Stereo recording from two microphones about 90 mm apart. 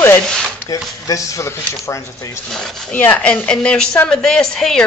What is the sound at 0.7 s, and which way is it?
Speech, 40° left (ahead or behind).